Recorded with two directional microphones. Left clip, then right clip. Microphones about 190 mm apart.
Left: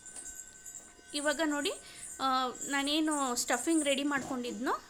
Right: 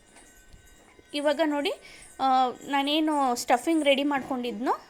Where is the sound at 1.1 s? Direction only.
10° right (ahead or behind).